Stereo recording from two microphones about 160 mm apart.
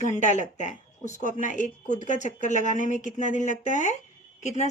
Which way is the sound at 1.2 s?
50° left (ahead or behind).